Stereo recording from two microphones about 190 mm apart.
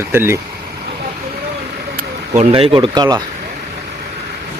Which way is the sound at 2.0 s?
35° right (ahead or behind).